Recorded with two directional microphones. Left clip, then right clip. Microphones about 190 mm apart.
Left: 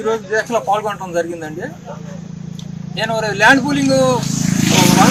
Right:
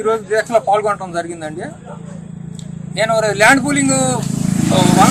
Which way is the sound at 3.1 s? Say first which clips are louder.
Right 1 dB; 20° right (ahead or behind).